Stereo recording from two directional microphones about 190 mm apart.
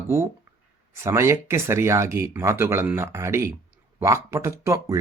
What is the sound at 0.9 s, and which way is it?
Speech, 15° right (ahead or behind).